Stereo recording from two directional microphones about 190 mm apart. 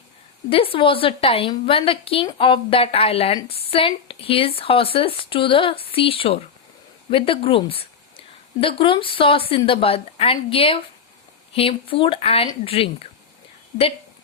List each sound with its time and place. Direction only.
0.5 s a woman's voice: 30° left (ahead or behind)